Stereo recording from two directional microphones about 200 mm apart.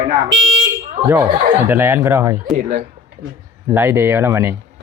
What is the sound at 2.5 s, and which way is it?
Speech, 40° right (ahead or behind).